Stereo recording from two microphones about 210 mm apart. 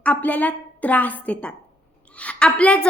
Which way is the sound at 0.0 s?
5° left (ahead or behind).